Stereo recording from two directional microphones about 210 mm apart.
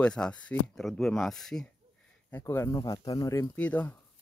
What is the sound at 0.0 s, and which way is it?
Speech, 5° left (ahead or behind).